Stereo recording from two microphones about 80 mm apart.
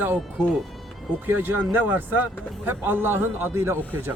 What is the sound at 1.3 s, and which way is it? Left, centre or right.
Speech, right.